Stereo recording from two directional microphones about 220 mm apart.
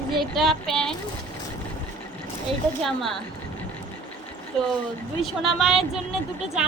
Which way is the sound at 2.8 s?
Centre (ahead or behind).